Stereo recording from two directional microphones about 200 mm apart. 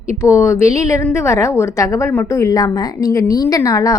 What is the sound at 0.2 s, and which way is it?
A woman's voice, 15° left (ahead or behind).